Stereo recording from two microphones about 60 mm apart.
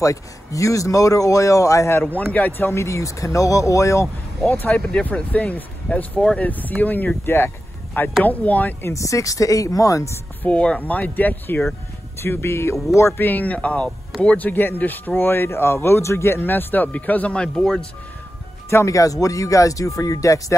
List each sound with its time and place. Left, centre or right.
0.0 s speech: left
2.1 s speech: left
2.6 s speech: left
4.7 s speech: centre
8.9 s speech: left
10.4 s speech: left
12.2 s speech: left
13.2 s speech: left
18.7 s speech: left
18.9 s speech: left